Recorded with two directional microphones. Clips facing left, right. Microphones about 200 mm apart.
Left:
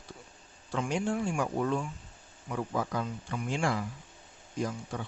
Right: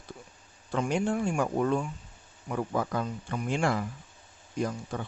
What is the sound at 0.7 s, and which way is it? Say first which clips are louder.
Speech: right 3 dB; 55° right (ahead or behind).